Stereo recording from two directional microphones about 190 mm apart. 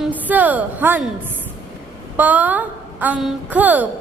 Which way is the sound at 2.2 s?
10° right (ahead or behind).